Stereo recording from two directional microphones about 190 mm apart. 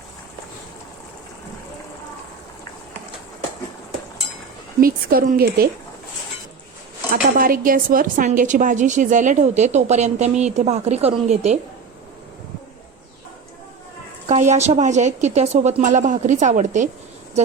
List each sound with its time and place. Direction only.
4.8 s speech: 50° right (ahead or behind)
7.1 s speech: 50° right (ahead or behind)
14.3 s speech: 35° right (ahead or behind)